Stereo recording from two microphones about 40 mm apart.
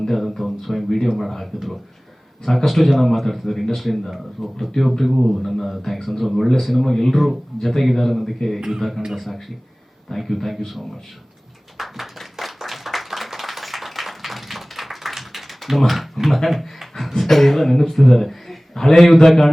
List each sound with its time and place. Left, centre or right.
0.0 s a man's voice: centre
11.8 s clapping: centre
19.2 s a man's voice: centre